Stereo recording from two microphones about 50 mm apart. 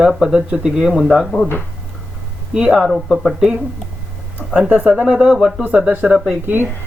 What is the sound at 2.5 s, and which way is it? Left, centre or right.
Speech, centre.